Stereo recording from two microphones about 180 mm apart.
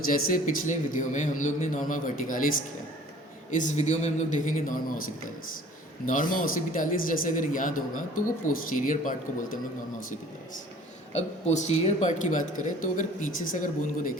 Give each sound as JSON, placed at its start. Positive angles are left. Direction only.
{"t": 0.1, "sound": "a man's voice", "side_deg": 50}
{"t": 4.6, "sound": "speech", "side_deg": 50}
{"t": 11.1, "sound": "speech", "side_deg": 40}